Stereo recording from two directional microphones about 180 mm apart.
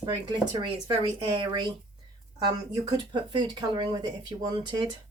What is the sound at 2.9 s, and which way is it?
Speech, 25° right (ahead or behind).